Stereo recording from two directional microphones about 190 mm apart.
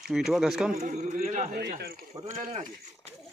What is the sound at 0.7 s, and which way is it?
A man's voice, 40° right (ahead or behind).